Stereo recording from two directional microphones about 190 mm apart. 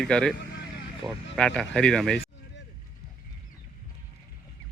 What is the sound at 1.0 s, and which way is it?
Speech, 20° right (ahead or behind).